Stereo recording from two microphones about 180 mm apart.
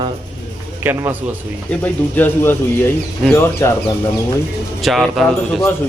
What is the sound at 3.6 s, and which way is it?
Speech, 15° left (ahead or behind).